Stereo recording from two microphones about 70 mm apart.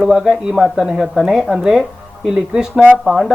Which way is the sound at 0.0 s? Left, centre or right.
Centre.